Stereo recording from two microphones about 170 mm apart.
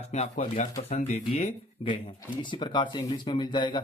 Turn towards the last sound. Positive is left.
turn(degrees=25)  # may be behind; listen again after turning